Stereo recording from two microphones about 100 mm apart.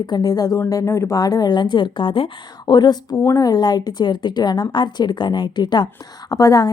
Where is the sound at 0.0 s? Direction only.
45° left (ahead or behind).